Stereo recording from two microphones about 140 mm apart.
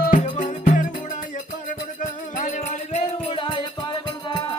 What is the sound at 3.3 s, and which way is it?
Music, 35° left (ahead or behind).